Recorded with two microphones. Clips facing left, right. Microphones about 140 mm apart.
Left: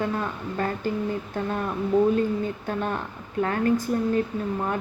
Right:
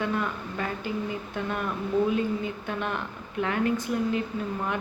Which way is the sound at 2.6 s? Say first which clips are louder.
Left 3 dB; 40° left (ahead or behind).